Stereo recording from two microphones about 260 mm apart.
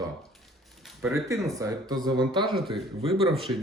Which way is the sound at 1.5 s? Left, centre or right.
Centre.